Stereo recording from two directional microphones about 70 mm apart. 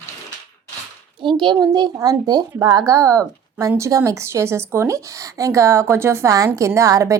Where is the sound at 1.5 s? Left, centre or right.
Right.